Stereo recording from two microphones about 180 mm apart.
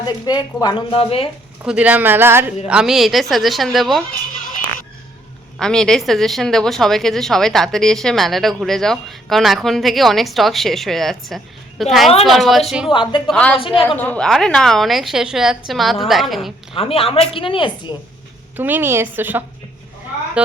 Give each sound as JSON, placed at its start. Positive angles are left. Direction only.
{"t": 0.0, "sound": "a woman's voice", "side_deg": 20}
{"t": 1.6, "sound": "a woman's voice", "side_deg": -5}
{"t": 5.5, "sound": "a woman's voice", "side_deg": 5}
{"t": 12.9, "sound": "a woman's voice", "side_deg": 25}
{"t": 13.2, "sound": "a woman's voice", "side_deg": 5}
{"t": 16.7, "sound": "a woman's voice", "side_deg": 30}
{"t": 18.5, "sound": "a woman's voice", "side_deg": -10}